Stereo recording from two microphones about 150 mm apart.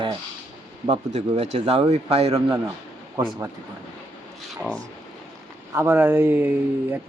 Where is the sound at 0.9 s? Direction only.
45° right (ahead or behind).